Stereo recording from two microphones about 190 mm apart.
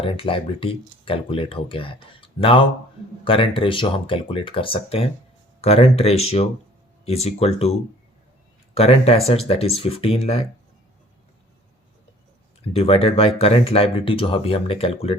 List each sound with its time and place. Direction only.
0.0 s speech: 30° left (ahead or behind)
12.7 s speech: 30° left (ahead or behind)